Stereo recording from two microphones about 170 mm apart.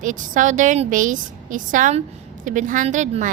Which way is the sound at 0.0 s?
50° right (ahead or behind).